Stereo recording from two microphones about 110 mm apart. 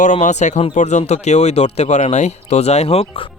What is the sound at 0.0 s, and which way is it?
Speech, 90° left.